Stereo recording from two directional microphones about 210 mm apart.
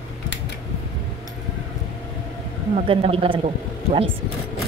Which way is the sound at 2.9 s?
25° right (ahead or behind).